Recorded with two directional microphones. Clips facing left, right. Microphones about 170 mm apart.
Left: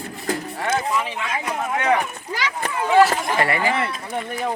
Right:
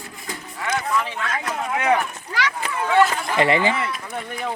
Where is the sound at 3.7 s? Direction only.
25° left (ahead or behind).